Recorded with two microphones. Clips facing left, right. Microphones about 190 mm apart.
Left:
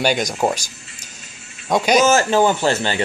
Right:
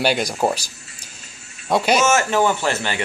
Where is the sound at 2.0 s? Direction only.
30° left (ahead or behind).